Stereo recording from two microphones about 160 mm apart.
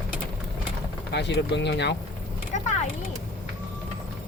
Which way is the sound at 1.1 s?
90° left.